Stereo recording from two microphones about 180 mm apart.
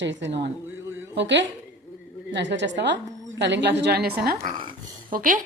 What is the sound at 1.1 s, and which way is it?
A woman's voice, 75° right (ahead or behind).